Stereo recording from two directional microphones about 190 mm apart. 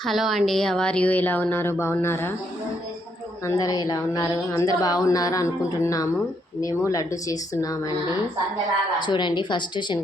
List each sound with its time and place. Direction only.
0.0 s speech: centre (ahead or behind)
3.4 s speech: 15° left (ahead or behind)
9.0 s speech: 25° left (ahead or behind)